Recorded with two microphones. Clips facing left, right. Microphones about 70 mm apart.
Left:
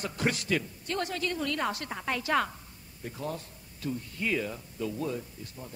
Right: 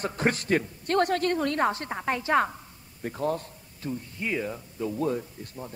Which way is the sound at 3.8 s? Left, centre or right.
Centre.